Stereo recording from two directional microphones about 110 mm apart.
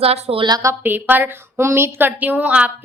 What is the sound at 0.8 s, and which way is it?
A woman's voice, 15° right (ahead or behind).